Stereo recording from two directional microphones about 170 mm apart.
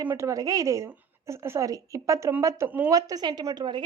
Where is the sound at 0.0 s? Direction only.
15° right (ahead or behind).